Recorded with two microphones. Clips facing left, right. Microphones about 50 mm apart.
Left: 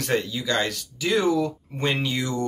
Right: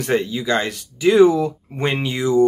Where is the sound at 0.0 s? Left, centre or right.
Centre.